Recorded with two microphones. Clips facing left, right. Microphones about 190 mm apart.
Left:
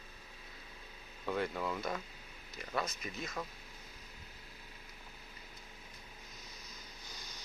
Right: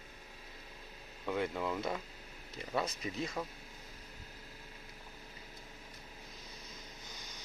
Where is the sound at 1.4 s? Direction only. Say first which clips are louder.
Right 2 dB; 15° right (ahead or behind).